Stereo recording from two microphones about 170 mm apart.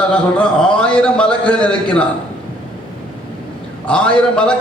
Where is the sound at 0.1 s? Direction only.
5° left (ahead or behind).